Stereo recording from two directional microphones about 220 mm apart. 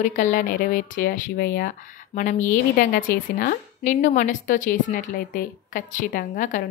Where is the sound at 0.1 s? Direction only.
35° left (ahead or behind).